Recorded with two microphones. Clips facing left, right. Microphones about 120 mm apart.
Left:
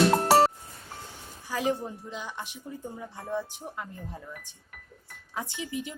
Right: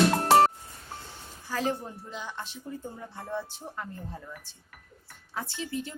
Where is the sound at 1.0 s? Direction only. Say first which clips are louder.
Left 2 dB; 15° left (ahead or behind).